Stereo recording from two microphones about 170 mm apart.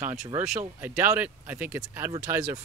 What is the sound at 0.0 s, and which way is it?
Speech, 15° right (ahead or behind).